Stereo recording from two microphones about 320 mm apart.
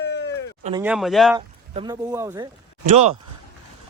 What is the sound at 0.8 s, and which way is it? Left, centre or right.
Speech, centre.